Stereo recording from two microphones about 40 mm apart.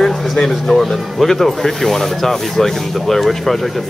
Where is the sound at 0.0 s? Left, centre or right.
Centre.